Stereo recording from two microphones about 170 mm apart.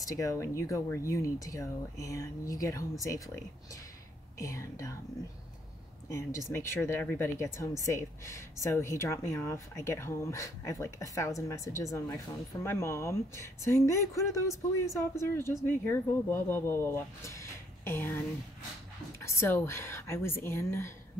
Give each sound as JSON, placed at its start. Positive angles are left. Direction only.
{"t": 0.0, "sound": "speech", "side_deg": 20}
{"t": 4.4, "sound": "speech", "side_deg": 20}
{"t": 6.1, "sound": "speech", "side_deg": 15}